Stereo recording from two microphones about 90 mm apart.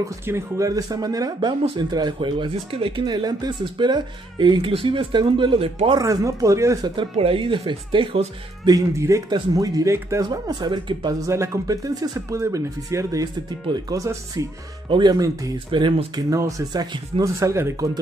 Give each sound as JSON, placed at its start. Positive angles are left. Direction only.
{"t": 0.3, "sound": "speech", "side_deg": -40}
{"t": 2.1, "sound": "speech", "side_deg": -65}
{"t": 3.1, "sound": "speech", "side_deg": -50}
{"t": 4.6, "sound": "speech", "side_deg": -80}
{"t": 5.9, "sound": "speech", "side_deg": -40}
{"t": 7.0, "sound": "speech", "side_deg": -85}
{"t": 8.6, "sound": "speech", "side_deg": -35}
{"t": 11.1, "sound": "speech", "side_deg": -35}
{"t": 14.9, "sound": "speech", "side_deg": -60}
{"t": 15.1, "sound": "speech", "side_deg": -40}
{"t": 15.7, "sound": "speech", "side_deg": -65}
{"t": 16.2, "sound": "speech", "side_deg": -40}